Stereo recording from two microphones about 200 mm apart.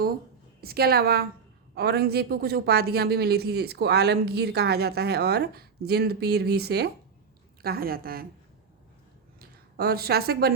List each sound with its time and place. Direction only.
0.6 s a woman's voice: 50° right (ahead or behind)
9.4 s a woman's voice: 50° right (ahead or behind)